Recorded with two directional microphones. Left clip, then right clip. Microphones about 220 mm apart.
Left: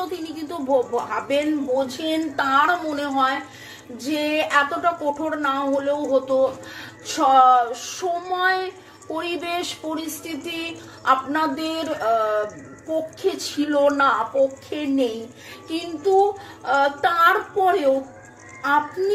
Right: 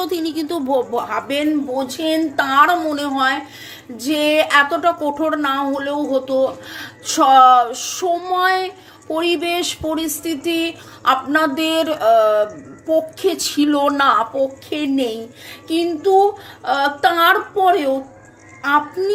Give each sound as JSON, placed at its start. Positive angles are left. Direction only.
{"t": 0.0, "sound": "a woman's voice", "side_deg": -45}